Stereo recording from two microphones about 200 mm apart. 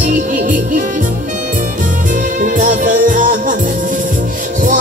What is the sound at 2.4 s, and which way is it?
Music, 40° right (ahead or behind).